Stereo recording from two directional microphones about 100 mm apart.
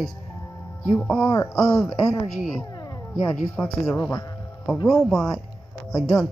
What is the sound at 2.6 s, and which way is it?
Cat, 40° left (ahead or behind).